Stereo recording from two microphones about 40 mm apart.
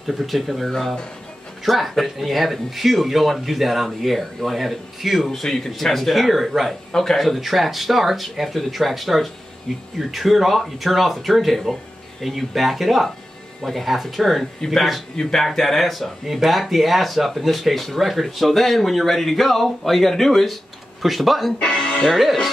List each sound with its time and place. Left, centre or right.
0.0 s speech: centre
6.9 s speech: centre
7.2 s speech: centre
21.5 s speech: centre
22.1 s speech: centre